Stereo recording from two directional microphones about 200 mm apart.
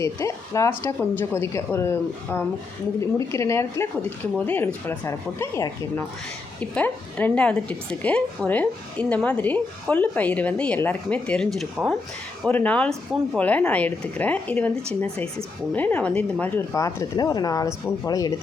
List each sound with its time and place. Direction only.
0.0 s speech: 15° left (ahead or behind)
15.7 s speech: 10° left (ahead or behind)